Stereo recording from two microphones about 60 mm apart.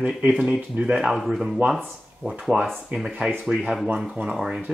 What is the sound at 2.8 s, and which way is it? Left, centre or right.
Speech, centre.